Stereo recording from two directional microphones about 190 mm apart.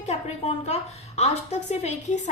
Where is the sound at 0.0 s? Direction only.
35° left (ahead or behind).